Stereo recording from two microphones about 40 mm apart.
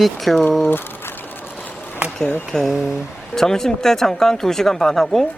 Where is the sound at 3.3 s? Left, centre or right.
Centre.